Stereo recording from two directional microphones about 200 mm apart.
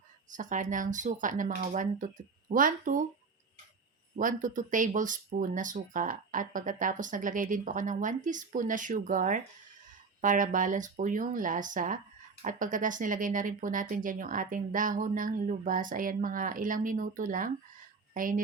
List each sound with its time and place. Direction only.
0.3 s speech: 40° right (ahead or behind)
4.2 s speech: 40° right (ahead or behind)